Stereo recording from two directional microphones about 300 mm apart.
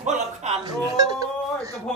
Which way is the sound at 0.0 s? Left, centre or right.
Right.